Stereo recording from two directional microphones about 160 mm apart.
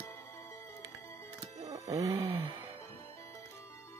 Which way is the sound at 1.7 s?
20° right (ahead or behind).